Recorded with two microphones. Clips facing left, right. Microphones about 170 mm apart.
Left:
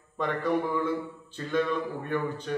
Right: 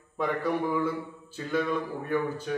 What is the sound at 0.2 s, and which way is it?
A man's voice, 10° right (ahead or behind).